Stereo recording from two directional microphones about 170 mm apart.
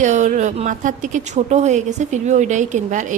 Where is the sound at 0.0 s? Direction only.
45° right (ahead or behind).